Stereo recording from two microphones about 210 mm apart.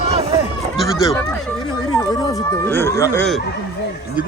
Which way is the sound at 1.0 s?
15° left (ahead or behind).